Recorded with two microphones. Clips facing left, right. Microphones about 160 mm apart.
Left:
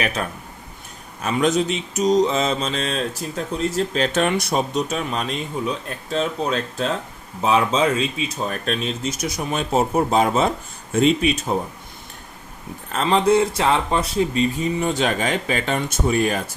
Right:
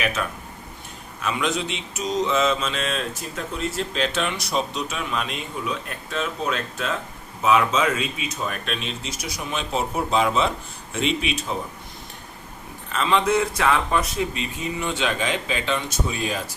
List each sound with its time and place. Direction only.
0.0 s mantra: 35° left (ahead or behind)
7.4 s speech: 30° left (ahead or behind)
12.9 s mantra: 40° left (ahead or behind); by 16.4 s 55° left (ahead or behind)